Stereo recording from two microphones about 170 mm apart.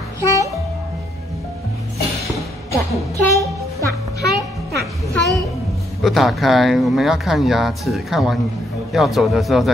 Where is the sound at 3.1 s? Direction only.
20° right (ahead or behind).